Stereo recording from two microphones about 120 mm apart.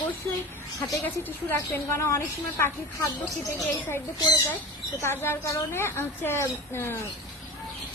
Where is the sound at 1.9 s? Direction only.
25° left (ahead or behind).